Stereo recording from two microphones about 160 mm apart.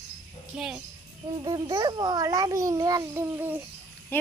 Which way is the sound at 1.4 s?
20° right (ahead or behind).